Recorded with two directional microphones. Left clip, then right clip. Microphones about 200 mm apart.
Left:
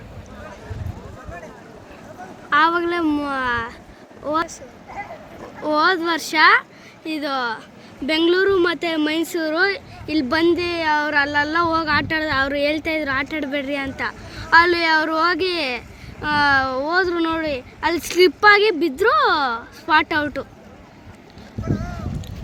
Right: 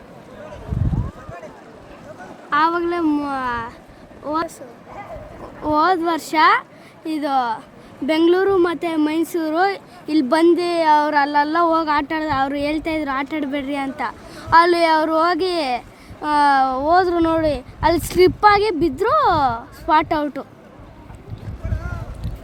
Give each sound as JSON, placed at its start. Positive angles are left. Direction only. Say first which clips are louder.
{"t": 2.5, "sound": "speech", "louder": "left 1 dB", "side_deg": -5}
{"t": 5.6, "sound": "a child's voice", "louder": "right 1 dB", "side_deg": -10}